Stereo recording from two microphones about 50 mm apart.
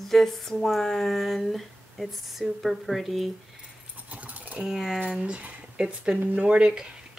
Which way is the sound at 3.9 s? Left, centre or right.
Right.